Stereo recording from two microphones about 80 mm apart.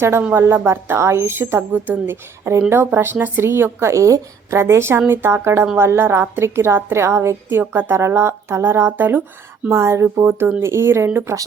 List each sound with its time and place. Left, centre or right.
0.0 s a woman's voice: right
9.6 s a woman's voice: right